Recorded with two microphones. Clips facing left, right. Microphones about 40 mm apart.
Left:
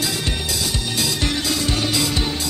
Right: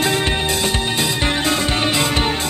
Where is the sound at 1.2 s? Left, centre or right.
Right.